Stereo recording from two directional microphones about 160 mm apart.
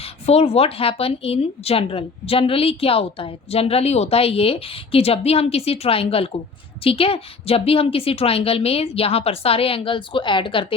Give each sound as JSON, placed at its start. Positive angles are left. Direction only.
{"t": 0.0, "sound": "a woman's voice", "side_deg": 40}